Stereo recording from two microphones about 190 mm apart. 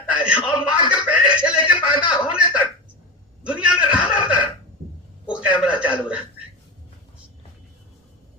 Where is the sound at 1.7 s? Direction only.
25° left (ahead or behind).